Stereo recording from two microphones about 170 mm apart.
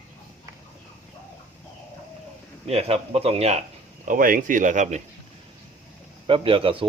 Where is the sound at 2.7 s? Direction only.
35° right (ahead or behind).